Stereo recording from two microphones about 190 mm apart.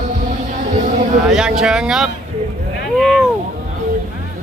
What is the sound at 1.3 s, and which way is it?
Speech, centre (ahead or behind).